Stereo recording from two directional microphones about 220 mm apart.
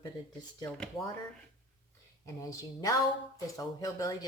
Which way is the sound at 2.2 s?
15° left (ahead or behind).